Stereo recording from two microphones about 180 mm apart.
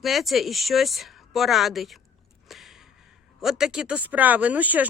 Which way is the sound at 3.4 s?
Centre (ahead or behind).